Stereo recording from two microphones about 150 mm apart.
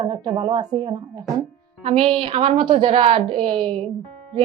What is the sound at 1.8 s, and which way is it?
A woman's voice, 45° right (ahead or behind).